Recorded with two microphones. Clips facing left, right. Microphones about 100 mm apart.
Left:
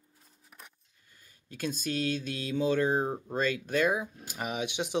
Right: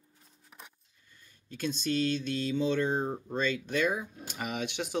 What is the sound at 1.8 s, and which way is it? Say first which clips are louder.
Speech: right 3 dB; 10° left (ahead or behind).